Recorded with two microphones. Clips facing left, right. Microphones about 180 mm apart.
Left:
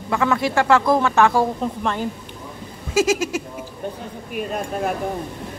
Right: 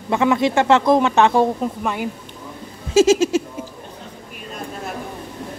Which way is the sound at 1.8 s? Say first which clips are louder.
Even; 10° right (ahead or behind).